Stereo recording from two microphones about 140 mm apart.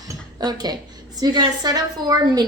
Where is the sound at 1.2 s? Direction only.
30° right (ahead or behind).